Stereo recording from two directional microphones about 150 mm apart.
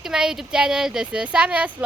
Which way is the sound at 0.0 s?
5° right (ahead or behind).